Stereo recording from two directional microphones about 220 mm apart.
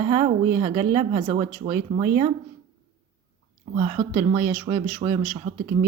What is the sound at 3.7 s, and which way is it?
Speech, 30° right (ahead or behind).